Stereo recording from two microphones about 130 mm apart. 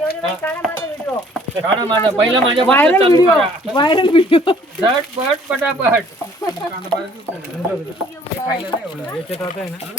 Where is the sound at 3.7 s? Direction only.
40° left (ahead or behind).